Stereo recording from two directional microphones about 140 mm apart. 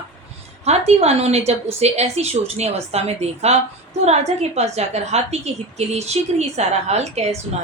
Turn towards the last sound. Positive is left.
turn(degrees=-50)  # may be behind; listen again after turning